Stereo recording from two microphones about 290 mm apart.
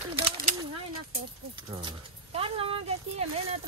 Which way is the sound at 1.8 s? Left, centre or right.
Centre.